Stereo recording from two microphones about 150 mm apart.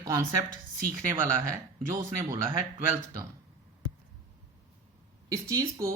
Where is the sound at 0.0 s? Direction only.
20° right (ahead or behind).